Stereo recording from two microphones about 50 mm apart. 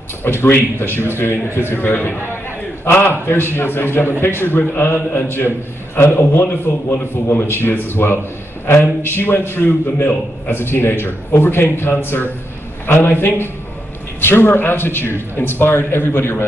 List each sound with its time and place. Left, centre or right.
0.2 s a man's voice: left
1.7 s a man's voice: left